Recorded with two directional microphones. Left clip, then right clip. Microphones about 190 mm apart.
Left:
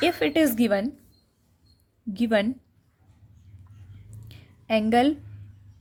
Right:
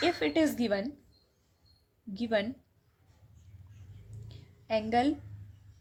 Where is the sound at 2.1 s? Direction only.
40° left (ahead or behind).